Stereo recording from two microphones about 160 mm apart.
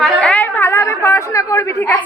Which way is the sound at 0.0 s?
5° left (ahead or behind).